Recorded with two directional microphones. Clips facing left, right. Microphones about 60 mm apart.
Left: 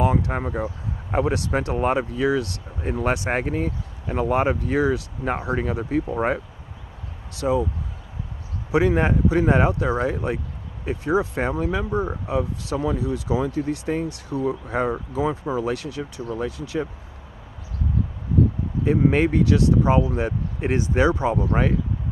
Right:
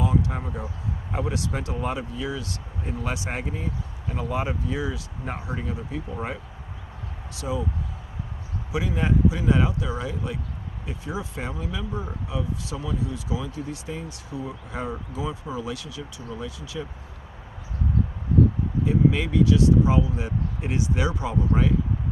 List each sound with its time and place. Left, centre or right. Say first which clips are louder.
0.0 s speech: left 4 dB; left
8.7 s speech: left 6 dB; left
14.9 s speech: left 7 dB; left
18.9 s speech: left 4 dB; left